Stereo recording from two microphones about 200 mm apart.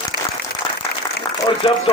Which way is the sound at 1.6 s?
25° left (ahead or behind).